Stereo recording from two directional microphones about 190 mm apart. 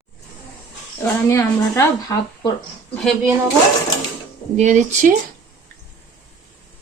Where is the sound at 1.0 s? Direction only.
10° left (ahead or behind).